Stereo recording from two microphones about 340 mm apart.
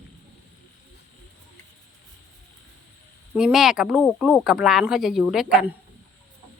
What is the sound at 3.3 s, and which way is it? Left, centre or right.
Speech, centre.